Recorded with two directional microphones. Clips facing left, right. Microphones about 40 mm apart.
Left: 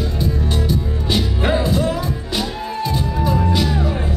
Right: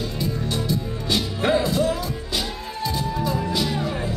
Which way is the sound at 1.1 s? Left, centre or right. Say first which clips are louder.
Left 2 dB; left.